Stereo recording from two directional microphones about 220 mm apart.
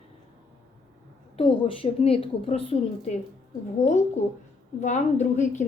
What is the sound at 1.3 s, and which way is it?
A woman's voice, 25° left (ahead or behind).